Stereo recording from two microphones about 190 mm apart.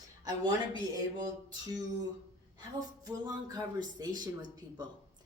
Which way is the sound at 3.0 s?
20° right (ahead or behind).